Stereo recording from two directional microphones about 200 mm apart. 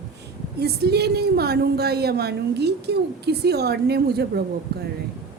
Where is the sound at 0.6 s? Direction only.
55° right (ahead or behind).